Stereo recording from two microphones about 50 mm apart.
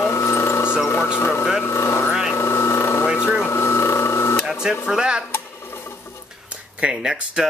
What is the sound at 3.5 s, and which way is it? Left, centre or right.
Printer, left.